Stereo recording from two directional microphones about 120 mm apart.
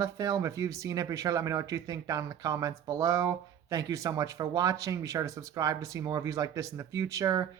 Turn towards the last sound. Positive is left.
turn(degrees=-30)  # may be behind; listen again after turning